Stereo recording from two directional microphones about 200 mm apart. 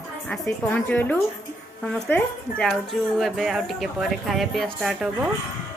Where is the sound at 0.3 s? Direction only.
5° left (ahead or behind).